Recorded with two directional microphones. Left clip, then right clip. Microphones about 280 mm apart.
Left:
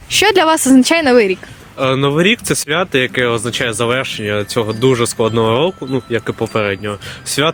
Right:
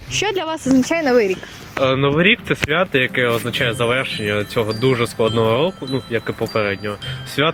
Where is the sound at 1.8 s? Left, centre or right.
Left.